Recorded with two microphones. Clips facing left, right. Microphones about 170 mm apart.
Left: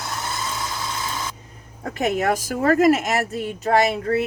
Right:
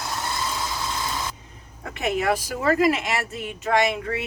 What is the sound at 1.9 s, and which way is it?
A woman's voice, 40° left (ahead or behind).